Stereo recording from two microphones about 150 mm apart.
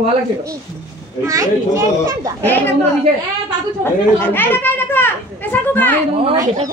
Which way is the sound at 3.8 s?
15° left (ahead or behind).